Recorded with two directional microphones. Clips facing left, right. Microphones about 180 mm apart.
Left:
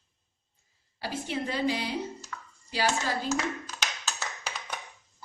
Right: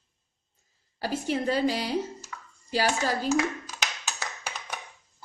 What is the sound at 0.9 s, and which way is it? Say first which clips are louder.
A woman's voice: right 4 dB; 40° right (ahead or behind).